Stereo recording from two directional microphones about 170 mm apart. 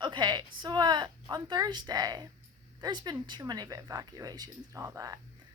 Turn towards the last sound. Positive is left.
turn(degrees=-20)  # may be behind; listen again after turning